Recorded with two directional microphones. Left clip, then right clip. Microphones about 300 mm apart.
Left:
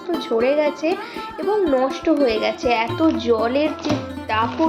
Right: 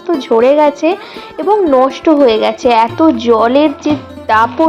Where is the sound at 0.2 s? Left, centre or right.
Right.